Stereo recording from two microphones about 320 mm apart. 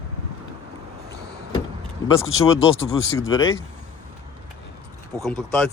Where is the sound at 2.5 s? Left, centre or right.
Left.